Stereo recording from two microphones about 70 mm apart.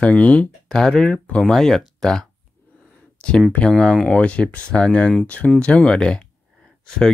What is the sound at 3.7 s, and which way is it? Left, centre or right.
Speech, centre.